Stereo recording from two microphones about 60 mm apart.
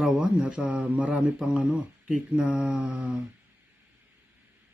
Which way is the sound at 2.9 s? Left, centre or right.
Right.